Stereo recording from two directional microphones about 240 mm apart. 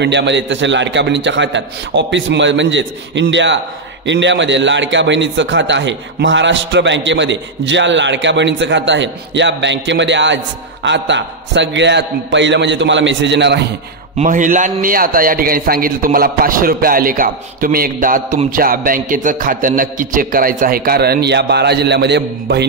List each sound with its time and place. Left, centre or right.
0.0 s a man's voice: right
14.1 s a man's voice: right